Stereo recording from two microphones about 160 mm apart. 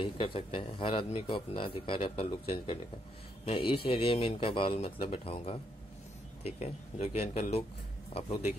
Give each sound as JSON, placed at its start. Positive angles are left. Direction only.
{"t": 0.0, "sound": "speech", "side_deg": 35}